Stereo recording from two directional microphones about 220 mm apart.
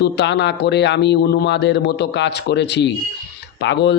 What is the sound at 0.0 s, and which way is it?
A man's voice, 50° left (ahead or behind).